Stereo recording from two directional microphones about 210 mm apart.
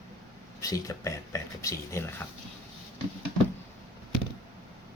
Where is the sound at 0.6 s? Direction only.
15° left (ahead or behind).